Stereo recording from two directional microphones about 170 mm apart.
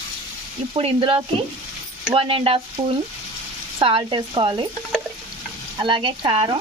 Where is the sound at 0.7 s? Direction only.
35° right (ahead or behind).